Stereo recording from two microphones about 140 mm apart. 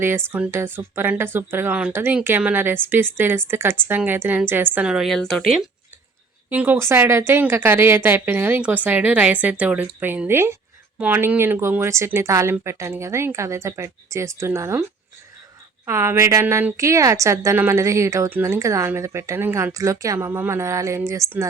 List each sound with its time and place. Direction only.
0.0 s speech: 15° right (ahead or behind); by 5.6 s centre (ahead or behind)
6.5 s speech: 10° right (ahead or behind)
15.9 s a woman's voice: 20° right (ahead or behind)